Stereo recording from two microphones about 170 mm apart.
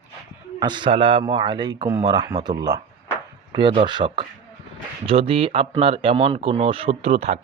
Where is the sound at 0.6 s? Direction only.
25° right (ahead or behind).